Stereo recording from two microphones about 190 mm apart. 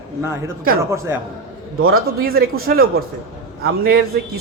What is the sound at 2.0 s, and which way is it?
A man's voice, 50° right (ahead or behind).